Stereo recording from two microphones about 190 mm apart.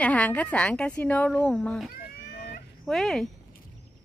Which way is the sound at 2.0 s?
55° left (ahead or behind).